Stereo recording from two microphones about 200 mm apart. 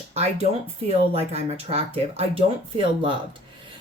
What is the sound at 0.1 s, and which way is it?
Speech, 30° right (ahead or behind).